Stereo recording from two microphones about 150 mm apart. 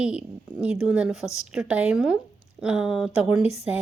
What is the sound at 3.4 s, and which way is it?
Speech, 45° left (ahead or behind).